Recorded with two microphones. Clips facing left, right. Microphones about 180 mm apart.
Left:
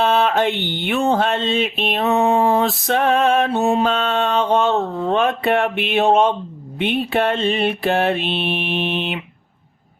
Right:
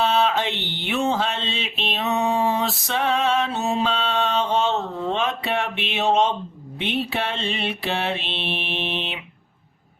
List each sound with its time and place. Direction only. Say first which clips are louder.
0.0 s mantra: left 4 dB; 55° left (ahead or behind)